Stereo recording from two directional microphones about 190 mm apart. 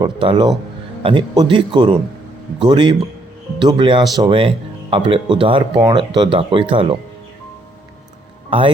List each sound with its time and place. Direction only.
0.0 s speech: 25° right (ahead or behind)
8.4 s speech: 30° right (ahead or behind)